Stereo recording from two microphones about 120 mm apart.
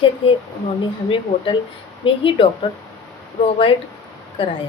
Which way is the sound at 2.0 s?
45° left (ahead or behind).